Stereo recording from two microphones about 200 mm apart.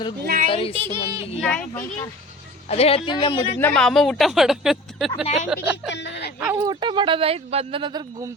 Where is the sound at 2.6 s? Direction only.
30° left (ahead or behind).